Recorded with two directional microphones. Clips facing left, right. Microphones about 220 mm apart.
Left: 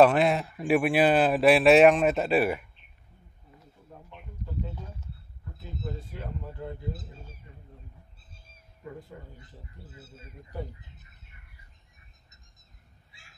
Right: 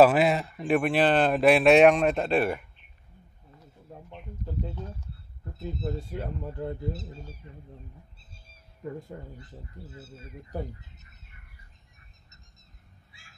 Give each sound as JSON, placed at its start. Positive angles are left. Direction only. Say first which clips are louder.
{"t": 0.0, "sound": "speech", "louder": "right 1 dB", "side_deg": -5}
{"t": 5.6, "sound": "speech", "louder": "right 5 dB", "side_deg": -45}
{"t": 9.1, "sound": "speech", "louder": "right 4 dB", "side_deg": -35}